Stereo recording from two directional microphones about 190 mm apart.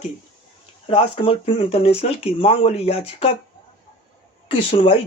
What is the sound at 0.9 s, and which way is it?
Speech, 30° left (ahead or behind).